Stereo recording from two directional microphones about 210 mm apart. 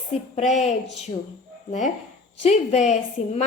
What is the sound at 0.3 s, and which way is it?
Speech, 35° left (ahead or behind).